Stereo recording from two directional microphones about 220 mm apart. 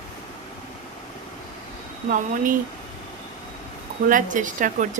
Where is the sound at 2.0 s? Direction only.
40° right (ahead or behind).